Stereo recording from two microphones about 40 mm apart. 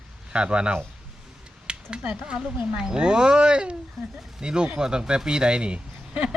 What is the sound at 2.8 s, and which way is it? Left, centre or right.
Speech, right.